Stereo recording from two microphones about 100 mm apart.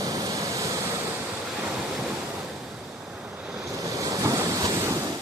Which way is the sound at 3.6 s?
35° right (ahead or behind).